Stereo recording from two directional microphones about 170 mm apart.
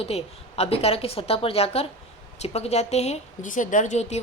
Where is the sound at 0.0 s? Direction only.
35° left (ahead or behind).